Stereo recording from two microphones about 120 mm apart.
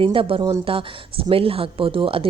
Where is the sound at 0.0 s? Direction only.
45° right (ahead or behind).